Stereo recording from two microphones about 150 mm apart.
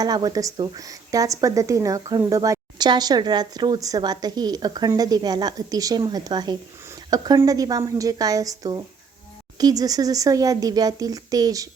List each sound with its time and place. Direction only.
0.0 s speech: 25° right (ahead or behind)